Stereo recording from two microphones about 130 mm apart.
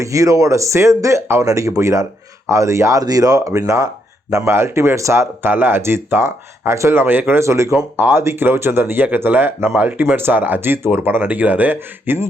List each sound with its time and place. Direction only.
0.0 s speech: 25° right (ahead or behind)